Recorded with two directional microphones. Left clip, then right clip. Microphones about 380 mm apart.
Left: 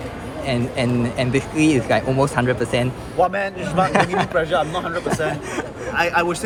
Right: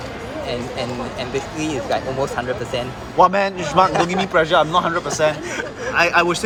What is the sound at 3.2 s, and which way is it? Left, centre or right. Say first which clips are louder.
Speech: right 5 dB; centre.